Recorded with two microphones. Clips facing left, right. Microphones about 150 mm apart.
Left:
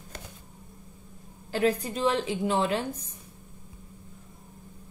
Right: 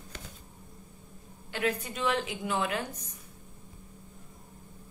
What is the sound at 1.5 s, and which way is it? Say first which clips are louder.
A woman's voice: left 6 dB; 35° left (ahead or behind).